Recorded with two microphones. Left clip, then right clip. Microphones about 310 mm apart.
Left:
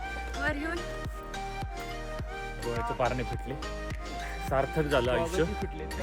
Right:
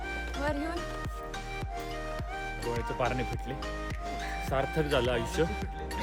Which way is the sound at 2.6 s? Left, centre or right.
Centre.